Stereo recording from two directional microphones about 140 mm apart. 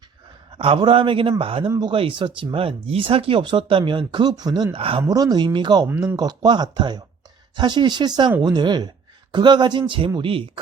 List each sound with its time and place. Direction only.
0.5 s speech: 40° right (ahead or behind)
1.6 s speech: 25° right (ahead or behind)
1.9 s speech: 40° right (ahead or behind)
5.0 s speech: 25° right (ahead or behind)